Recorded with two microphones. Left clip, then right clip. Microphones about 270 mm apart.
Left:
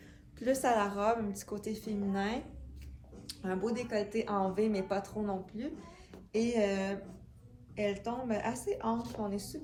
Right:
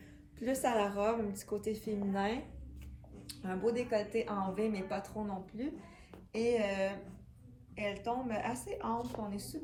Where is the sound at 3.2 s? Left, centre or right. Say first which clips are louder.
Left 4 dB; centre.